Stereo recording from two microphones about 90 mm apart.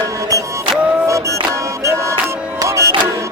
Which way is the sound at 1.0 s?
35° right (ahead or behind).